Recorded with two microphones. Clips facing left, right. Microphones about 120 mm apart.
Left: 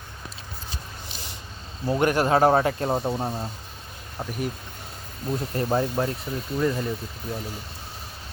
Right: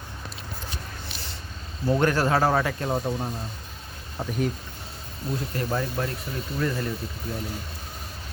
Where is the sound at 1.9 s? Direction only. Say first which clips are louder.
Left 1 dB; 15° left (ahead or behind); by 3.4 s 30° left (ahead or behind).